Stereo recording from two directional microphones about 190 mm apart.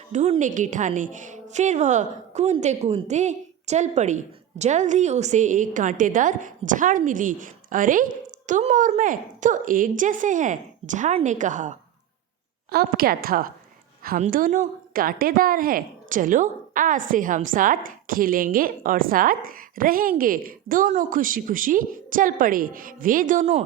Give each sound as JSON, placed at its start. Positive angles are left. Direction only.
{"t": 0.1, "sound": "a woman's voice", "side_deg": -35}
{"t": 12.7, "sound": "a woman's voice", "side_deg": -50}